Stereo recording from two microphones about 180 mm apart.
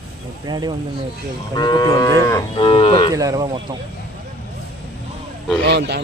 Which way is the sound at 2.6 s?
30° left (ahead or behind).